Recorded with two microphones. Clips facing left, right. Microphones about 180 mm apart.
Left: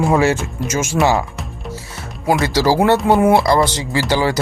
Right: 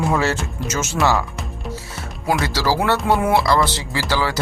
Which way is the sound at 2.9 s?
45° left (ahead or behind).